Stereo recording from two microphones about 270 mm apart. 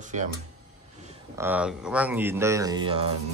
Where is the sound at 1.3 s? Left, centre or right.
Centre.